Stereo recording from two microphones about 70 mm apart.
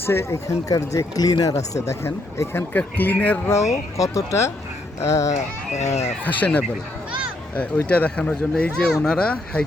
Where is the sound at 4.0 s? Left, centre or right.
Left.